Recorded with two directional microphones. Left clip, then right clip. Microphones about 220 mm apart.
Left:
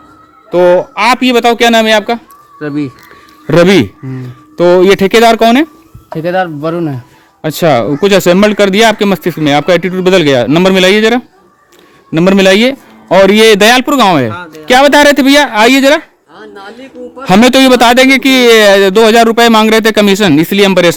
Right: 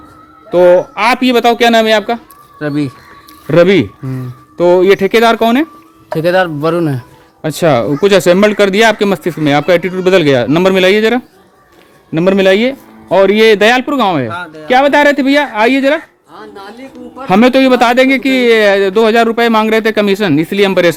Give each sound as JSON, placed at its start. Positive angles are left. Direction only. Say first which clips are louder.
{"t": 0.5, "sound": "speech", "louder": "even", "side_deg": 25}
{"t": 2.6, "sound": "speech", "louder": "even", "side_deg": -10}
{"t": 3.4, "sound": "speech", "louder": "left 2 dB", "side_deg": 55}
{"t": 4.5, "sound": "speech", "louder": "left 2 dB", "side_deg": 40}
{"t": 6.1, "sound": "a man's voice", "louder": "right 2 dB", "side_deg": -20}
{"t": 7.4, "sound": "speech", "louder": "left 2 dB", "side_deg": 30}
{"t": 12.1, "sound": "speech", "louder": "left 2 dB", "side_deg": 45}
{"t": 14.3, "sound": "speech", "louder": "left 1 dB", "side_deg": -10}
{"t": 14.7, "sound": "speech", "louder": "left 3 dB", "side_deg": 50}
{"t": 16.3, "sound": "a sound", "louder": "left 1 dB", "side_deg": 15}
{"t": 17.2, "sound": "speech", "louder": "left 3 dB", "side_deg": 45}